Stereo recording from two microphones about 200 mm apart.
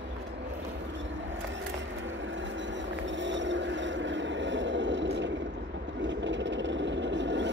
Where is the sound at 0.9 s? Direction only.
65° right (ahead or behind).